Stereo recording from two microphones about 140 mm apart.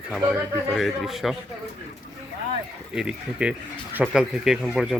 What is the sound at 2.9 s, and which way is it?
Speech, 5° right (ahead or behind).